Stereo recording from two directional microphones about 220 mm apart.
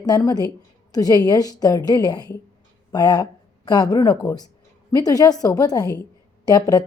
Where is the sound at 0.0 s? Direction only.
15° left (ahead or behind).